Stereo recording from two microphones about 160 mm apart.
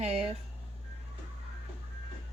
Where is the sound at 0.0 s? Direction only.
40° right (ahead or behind).